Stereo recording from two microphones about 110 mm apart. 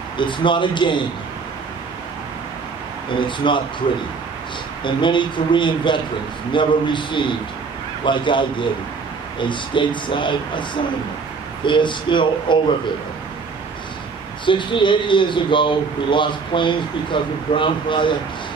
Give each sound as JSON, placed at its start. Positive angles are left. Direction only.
{"t": 0.2, "sound": "speech", "side_deg": 45}
{"t": 3.2, "sound": "speech", "side_deg": 45}
{"t": 4.8, "sound": "speech", "side_deg": 45}
{"t": 14.4, "sound": "speech", "side_deg": 50}